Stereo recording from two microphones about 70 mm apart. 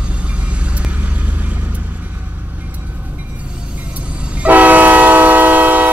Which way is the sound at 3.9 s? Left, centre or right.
Centre.